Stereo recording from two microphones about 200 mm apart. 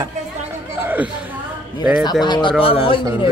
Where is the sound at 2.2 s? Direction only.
20° left (ahead or behind).